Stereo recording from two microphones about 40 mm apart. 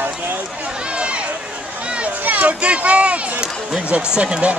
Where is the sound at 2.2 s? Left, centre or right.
Right.